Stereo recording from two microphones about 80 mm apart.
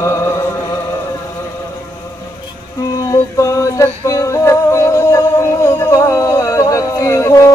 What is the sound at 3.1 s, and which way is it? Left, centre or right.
Music, left.